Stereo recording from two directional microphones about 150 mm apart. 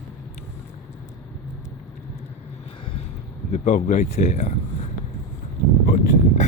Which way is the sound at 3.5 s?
50° left (ahead or behind).